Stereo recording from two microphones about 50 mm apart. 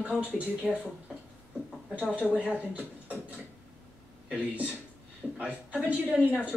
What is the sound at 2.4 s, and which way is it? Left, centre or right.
Beatboxing, right.